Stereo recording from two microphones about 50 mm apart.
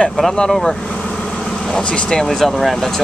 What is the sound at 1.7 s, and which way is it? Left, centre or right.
Speech, centre.